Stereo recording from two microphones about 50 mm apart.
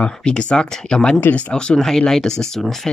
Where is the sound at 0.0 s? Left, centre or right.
Centre.